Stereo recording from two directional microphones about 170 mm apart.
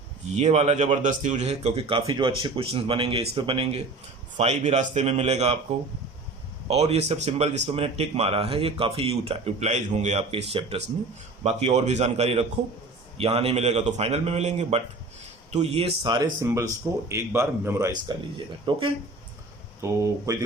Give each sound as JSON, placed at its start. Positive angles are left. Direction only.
{"t": 0.3, "sound": "speech", "side_deg": -40}
{"t": 6.7, "sound": "a man's voice", "side_deg": -35}
{"t": 18.3, "sound": "speech", "side_deg": -30}
{"t": 19.8, "sound": "a man's voice", "side_deg": -15}